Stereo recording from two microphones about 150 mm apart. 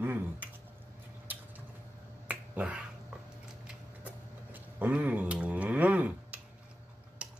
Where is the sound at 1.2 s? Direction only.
10° right (ahead or behind).